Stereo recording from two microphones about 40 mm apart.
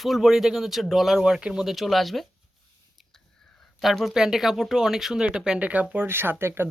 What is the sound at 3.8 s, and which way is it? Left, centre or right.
A man's voice, centre.